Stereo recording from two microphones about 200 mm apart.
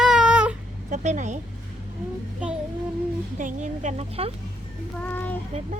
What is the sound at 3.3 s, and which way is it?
Speech, 40° right (ahead or behind).